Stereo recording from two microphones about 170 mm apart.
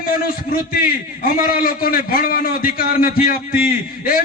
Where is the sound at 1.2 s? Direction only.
60° left (ahead or behind).